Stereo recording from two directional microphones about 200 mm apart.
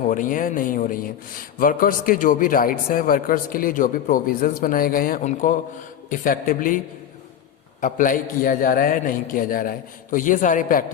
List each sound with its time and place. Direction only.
0.1 s a man's voice: 40° left (ahead or behind)